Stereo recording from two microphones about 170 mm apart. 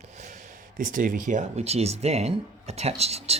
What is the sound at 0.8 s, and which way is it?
Speech, 50° right (ahead or behind).